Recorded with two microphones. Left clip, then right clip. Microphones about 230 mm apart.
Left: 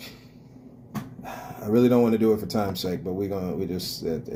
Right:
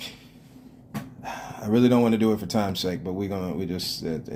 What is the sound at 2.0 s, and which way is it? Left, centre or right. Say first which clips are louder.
Speech: left 1 dB; right.